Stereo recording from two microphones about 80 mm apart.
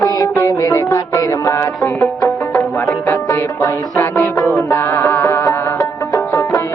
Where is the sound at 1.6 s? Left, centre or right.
Left.